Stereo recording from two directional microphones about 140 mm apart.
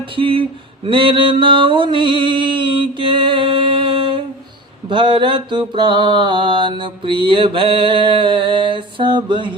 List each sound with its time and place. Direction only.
0.2 s mantra: 40° right (ahead or behind)